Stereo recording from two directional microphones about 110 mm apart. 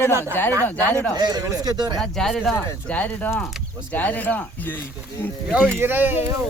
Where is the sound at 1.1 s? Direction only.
35° right (ahead or behind).